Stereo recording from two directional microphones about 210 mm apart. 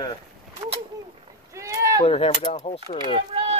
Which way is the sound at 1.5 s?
15° right (ahead or behind).